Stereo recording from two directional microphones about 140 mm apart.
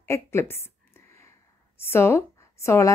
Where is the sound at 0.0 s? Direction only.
20° left (ahead or behind).